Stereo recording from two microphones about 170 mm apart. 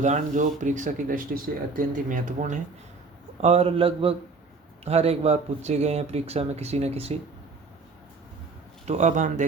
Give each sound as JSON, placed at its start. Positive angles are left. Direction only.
{"t": 0.0, "sound": "speech", "side_deg": -45}
{"t": 3.4, "sound": "speech", "side_deg": -40}
{"t": 8.9, "sound": "speech", "side_deg": -45}